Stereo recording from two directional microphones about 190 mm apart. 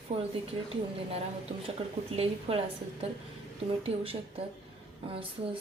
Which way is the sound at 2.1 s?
30° right (ahead or behind).